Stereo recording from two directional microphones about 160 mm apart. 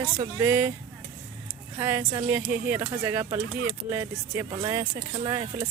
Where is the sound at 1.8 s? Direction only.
15° right (ahead or behind).